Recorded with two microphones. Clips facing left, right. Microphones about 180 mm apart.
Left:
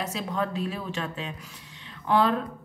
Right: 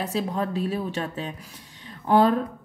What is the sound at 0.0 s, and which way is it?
A woman's voice, 35° right (ahead or behind).